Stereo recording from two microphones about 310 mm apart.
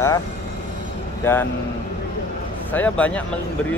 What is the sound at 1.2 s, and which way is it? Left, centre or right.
Speech, centre.